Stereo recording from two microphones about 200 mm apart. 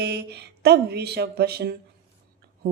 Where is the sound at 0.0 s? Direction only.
55° right (ahead or behind).